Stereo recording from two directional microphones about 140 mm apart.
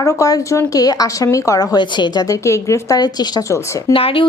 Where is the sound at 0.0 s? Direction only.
25° left (ahead or behind).